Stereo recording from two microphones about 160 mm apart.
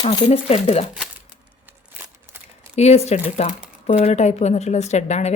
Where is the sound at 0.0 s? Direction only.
35° left (ahead or behind).